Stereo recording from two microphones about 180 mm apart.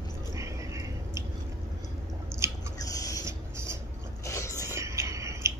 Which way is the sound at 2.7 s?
20° left (ahead or behind).